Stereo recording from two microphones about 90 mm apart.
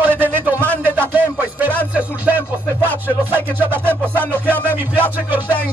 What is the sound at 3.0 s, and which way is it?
Speech, 25° right (ahead or behind).